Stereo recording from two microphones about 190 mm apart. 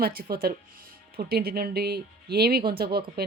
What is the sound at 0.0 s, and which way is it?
Speech, 55° right (ahead or behind).